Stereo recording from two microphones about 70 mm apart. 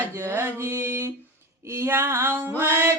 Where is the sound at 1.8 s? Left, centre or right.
Right.